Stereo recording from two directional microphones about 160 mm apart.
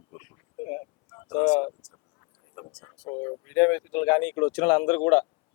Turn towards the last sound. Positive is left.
turn(degrees=10)  # may be behind; listen again after turning